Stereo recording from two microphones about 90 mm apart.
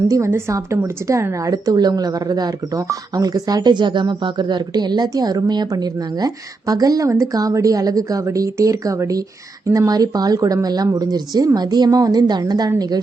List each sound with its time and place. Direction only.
0.5 s speech: 35° right (ahead or behind)